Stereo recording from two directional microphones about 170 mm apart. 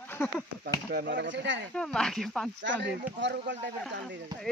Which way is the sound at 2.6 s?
90° right.